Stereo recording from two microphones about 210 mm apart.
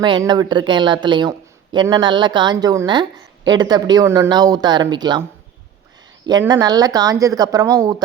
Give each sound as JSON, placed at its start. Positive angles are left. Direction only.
{"t": 0.0, "sound": "speech", "side_deg": -20}
{"t": 6.2, "sound": "speech", "side_deg": -20}